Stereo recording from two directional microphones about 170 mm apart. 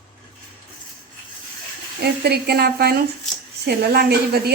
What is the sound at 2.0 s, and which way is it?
A woman's voice, 70° right (ahead or behind).